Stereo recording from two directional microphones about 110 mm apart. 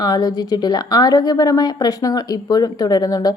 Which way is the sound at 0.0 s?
35° left (ahead or behind).